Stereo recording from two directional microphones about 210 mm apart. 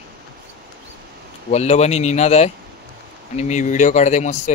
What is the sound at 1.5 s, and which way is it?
Speech, 30° left (ahead or behind).